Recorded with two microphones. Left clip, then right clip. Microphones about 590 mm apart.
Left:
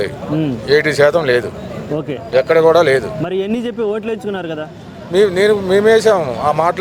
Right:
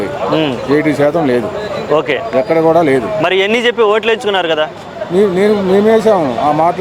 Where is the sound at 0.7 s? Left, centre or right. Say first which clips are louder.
Left 2 dB; left.